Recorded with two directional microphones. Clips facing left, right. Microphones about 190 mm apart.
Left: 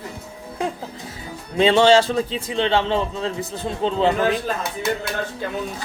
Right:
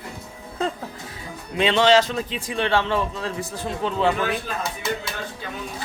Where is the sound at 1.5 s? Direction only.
30° left (ahead or behind).